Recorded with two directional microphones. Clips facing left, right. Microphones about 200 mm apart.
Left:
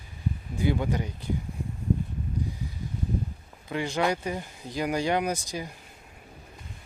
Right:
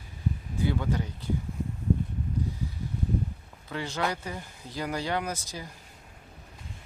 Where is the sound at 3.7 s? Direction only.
15° left (ahead or behind).